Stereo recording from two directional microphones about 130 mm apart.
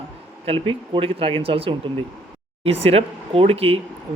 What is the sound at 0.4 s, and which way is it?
Speech, 40° right (ahead or behind).